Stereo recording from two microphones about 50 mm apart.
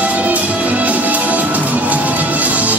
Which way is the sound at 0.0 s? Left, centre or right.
Right.